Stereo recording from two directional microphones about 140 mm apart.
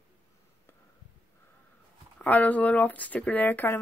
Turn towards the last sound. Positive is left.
turn(degrees=15)  # may be behind; listen again after turning